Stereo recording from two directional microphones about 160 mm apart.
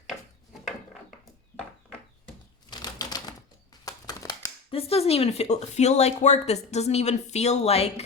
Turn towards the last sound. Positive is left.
turn(degrees=40)  # may be behind; listen again after turning